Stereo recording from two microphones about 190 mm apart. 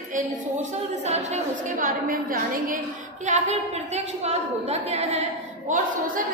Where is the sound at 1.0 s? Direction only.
35° right (ahead or behind).